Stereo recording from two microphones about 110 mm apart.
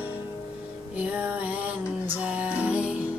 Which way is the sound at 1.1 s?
15° right (ahead or behind).